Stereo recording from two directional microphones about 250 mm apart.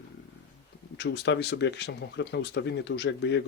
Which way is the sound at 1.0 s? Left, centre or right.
Left.